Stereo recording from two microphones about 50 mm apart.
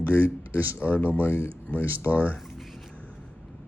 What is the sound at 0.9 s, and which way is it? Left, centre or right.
Speech, left.